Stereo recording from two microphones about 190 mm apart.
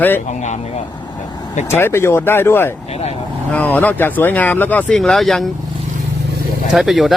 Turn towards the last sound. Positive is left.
turn(degrees=0)  # may be behind; listen again after turning